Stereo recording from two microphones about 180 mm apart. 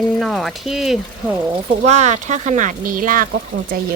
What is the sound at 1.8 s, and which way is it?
Speech, 40° right (ahead or behind).